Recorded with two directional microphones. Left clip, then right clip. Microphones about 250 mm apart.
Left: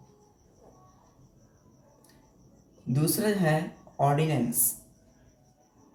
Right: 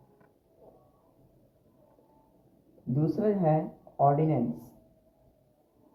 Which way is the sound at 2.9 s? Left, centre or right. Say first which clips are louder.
Even; left.